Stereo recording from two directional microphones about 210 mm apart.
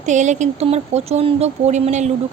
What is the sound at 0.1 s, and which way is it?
Speech, 35° right (ahead or behind).